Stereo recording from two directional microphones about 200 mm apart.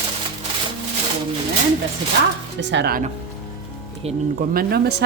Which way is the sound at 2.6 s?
60° right (ahead or behind).